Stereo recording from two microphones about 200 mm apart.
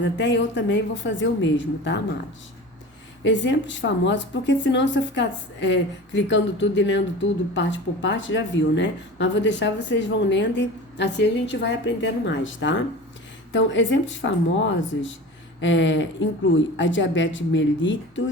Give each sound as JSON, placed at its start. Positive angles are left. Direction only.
{"t": 0.0, "sound": "speech", "side_deg": 60}
{"t": 3.2, "sound": "speech", "side_deg": 65}